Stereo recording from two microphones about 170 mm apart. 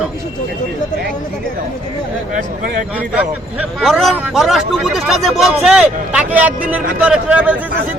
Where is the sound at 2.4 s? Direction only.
55° right (ahead or behind).